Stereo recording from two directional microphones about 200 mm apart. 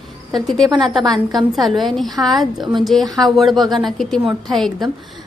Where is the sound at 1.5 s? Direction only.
Centre (ahead or behind).